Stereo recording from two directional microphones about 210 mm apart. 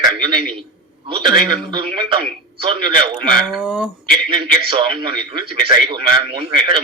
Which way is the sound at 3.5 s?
5° right (ahead or behind).